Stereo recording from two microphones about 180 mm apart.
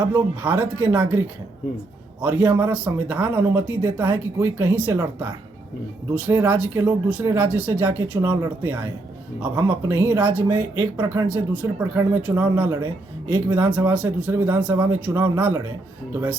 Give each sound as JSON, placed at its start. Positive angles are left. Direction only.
{"t": 0.1, "sound": "speech", "side_deg": -10}
{"t": 2.6, "sound": "speech", "side_deg": -10}